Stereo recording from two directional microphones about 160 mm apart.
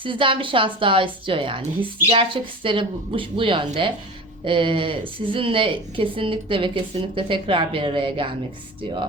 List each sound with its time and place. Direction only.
0.0 s a woman's voice: 30° right (ahead or behind)